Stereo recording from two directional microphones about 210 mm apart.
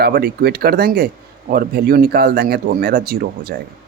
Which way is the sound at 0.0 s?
50° right (ahead or behind).